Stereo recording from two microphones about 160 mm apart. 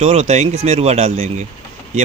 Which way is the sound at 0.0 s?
45° right (ahead or behind).